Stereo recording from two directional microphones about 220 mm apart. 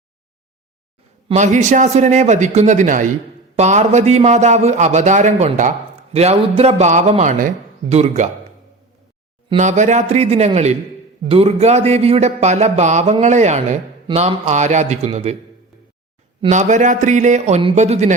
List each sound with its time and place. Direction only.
1.3 s a man's voice: 35° right (ahead or behind)
9.5 s a man's voice: 30° right (ahead or behind)
16.4 s a man's voice: 35° right (ahead or behind)